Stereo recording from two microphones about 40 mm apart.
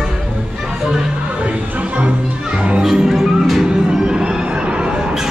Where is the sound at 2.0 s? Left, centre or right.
Right.